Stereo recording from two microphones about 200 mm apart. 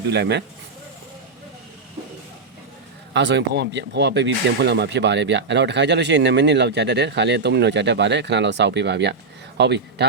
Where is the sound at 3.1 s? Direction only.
60° right (ahead or behind).